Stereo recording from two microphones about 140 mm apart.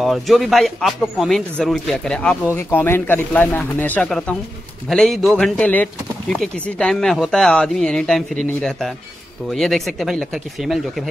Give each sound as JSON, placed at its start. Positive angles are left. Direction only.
{"t": 0.0, "sound": "speech", "side_deg": 0}